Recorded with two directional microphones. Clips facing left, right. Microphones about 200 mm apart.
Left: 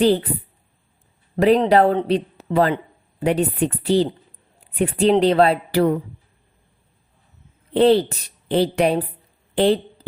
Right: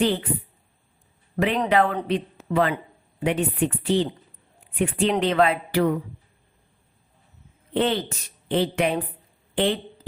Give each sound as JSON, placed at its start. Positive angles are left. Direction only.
{"t": 0.0, "sound": "a woman's voice", "side_deg": 35}
{"t": 1.4, "sound": "a woman's voice", "side_deg": 35}
{"t": 7.7, "sound": "a woman's voice", "side_deg": 35}